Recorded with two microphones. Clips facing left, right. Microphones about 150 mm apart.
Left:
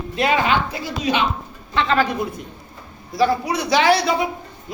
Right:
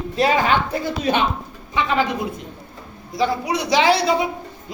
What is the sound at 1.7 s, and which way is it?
Speech, 15° right (ahead or behind).